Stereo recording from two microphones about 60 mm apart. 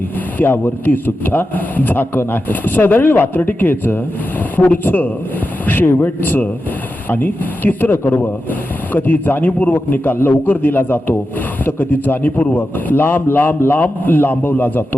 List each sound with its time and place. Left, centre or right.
0.3 s a man's voice: left